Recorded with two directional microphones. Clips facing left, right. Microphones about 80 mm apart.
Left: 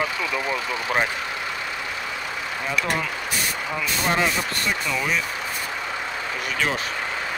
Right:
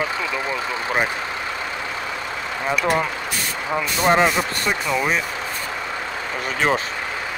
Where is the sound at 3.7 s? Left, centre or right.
Right.